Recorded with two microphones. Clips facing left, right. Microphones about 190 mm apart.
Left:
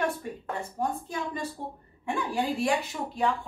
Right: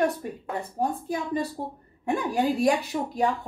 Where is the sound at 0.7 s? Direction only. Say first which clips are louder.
Right 4 dB; 35° right (ahead or behind).